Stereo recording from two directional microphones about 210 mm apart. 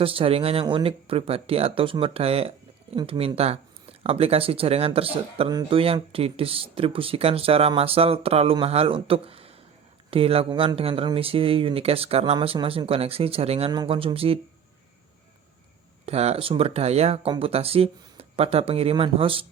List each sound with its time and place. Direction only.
0.0 s speech: 25° right (ahead or behind)
16.0 s speech: 30° right (ahead or behind)